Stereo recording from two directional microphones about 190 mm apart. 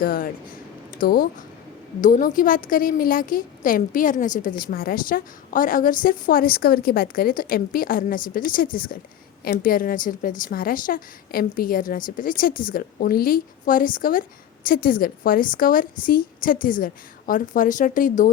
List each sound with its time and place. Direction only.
0.0 s a woman's voice: 50° left (ahead or behind)